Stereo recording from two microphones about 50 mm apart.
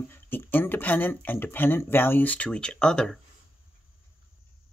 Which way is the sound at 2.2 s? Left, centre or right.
Left.